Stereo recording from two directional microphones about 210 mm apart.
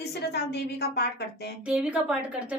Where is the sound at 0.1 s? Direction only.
50° left (ahead or behind).